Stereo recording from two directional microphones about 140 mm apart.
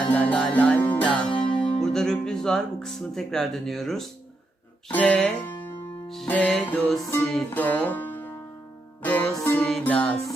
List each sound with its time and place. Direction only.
0.1 s music: 10° left (ahead or behind)
1.3 s music: 35° left (ahead or behind)
1.8 s speech: 5° left (ahead or behind)
4.9 s music: 10° left (ahead or behind)